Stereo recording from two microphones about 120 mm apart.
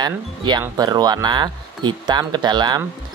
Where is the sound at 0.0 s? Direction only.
35° right (ahead or behind).